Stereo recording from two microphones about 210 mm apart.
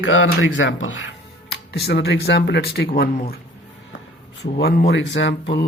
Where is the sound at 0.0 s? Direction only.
65° left (ahead or behind); by 3.4 s 45° left (ahead or behind).